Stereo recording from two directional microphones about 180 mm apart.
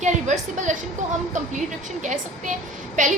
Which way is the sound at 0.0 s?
40° right (ahead or behind).